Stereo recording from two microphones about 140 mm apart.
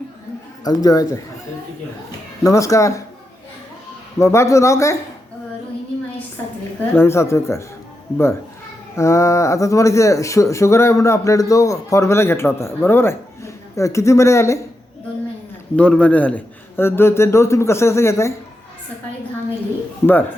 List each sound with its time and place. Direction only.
0.6 s speech: 25° left (ahead or behind)
2.4 s speech: 20° left (ahead or behind)
4.2 s speech: 20° left (ahead or behind)
6.9 s speech: 20° left (ahead or behind)
9.0 s speech: 20° left (ahead or behind)
15.7 s a man's voice: 10° left (ahead or behind)
20.0 s speech: 20° left (ahead or behind)